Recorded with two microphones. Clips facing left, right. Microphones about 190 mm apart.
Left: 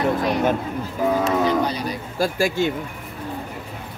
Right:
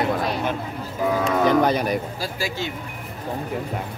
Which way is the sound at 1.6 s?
50° right (ahead or behind).